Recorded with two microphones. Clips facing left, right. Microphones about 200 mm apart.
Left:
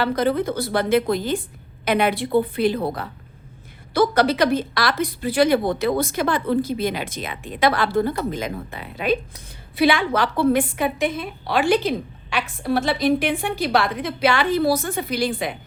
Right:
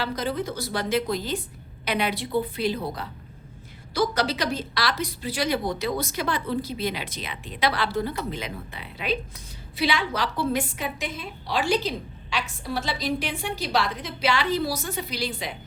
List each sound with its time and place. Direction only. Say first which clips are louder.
0.0 s a woman's voice: left 7 dB; 55° left (ahead or behind)